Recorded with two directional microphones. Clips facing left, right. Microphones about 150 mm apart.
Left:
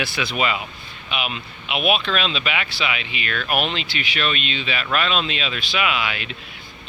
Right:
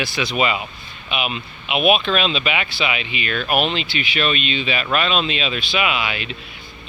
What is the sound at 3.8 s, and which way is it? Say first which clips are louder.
Speech: right 3 dB; 40° left (ahead or behind).